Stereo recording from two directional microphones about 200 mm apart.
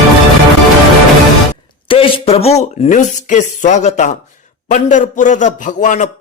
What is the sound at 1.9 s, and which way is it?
Speech, 25° left (ahead or behind).